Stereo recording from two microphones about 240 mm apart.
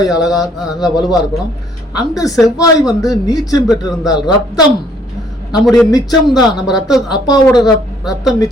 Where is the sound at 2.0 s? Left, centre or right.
Centre.